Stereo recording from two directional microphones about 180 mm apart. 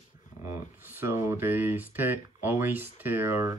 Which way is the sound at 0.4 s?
15° right (ahead or behind).